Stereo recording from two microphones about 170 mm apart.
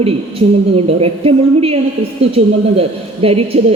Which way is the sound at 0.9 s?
35° right (ahead or behind).